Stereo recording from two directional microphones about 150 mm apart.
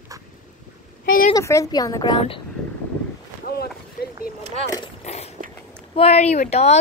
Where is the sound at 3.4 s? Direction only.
90° left.